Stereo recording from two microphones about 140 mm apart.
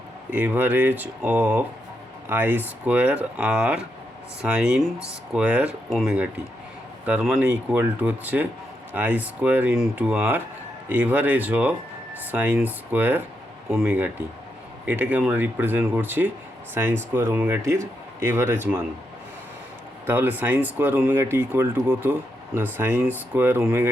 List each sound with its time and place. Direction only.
0.3 s speech: 10° right (ahead or behind)
13.7 s speech: centre (ahead or behind)
13.9 s speech: 10° right (ahead or behind)
20.1 s speech: 15° right (ahead or behind)